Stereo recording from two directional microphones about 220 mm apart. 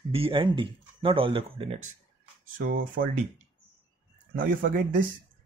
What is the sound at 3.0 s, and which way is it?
Speech, 45° right (ahead or behind).